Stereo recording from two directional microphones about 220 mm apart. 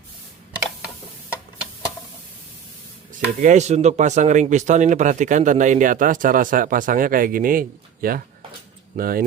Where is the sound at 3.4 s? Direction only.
30° right (ahead or behind).